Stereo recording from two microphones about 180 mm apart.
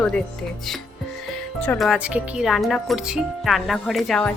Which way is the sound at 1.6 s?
10° left (ahead or behind).